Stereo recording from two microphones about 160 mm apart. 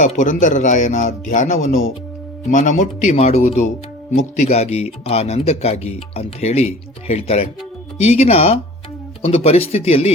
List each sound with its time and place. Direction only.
0.0 s speech: 50° left (ahead or behind)